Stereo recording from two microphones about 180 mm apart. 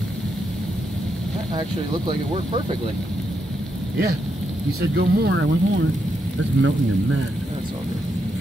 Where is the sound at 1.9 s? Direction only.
25° right (ahead or behind).